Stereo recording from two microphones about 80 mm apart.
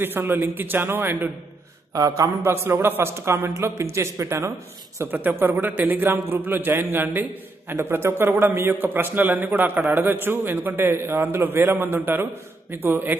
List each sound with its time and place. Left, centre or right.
0.0 s a man's voice: right
2.0 s a man's voice: right
4.9 s a man's voice: right